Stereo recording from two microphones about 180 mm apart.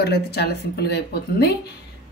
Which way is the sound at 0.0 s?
65° left (ahead or behind).